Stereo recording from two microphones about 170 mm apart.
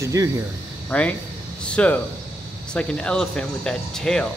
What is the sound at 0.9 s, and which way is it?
Speech, 10° left (ahead or behind).